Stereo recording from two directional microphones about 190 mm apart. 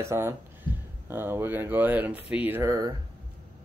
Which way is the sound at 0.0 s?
15° right (ahead or behind).